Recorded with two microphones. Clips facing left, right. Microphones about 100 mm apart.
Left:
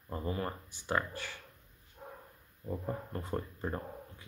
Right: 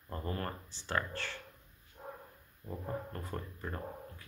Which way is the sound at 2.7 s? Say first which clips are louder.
Left 2 dB; 20° left (ahead or behind).